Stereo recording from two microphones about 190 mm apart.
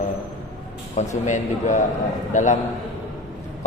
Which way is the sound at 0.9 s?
35° left (ahead or behind).